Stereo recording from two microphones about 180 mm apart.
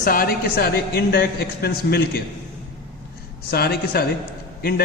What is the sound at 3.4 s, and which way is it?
A woman's voice, 60° left (ahead or behind).